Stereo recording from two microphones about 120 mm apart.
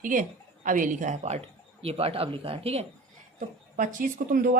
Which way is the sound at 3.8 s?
90° right.